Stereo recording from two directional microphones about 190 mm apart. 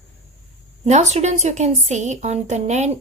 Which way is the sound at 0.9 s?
35° right (ahead or behind).